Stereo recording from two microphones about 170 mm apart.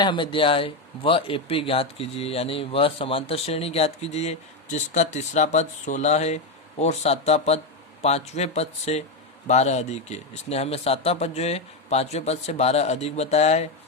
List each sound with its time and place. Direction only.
0.0 s speech: 30° left (ahead or behind)